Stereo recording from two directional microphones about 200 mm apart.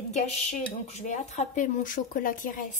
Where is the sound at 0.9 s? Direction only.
35° left (ahead or behind).